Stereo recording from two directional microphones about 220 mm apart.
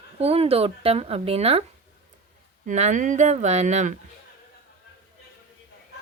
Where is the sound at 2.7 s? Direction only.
35° right (ahead or behind).